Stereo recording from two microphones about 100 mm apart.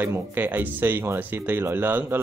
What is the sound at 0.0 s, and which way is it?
Speech, 20° right (ahead or behind).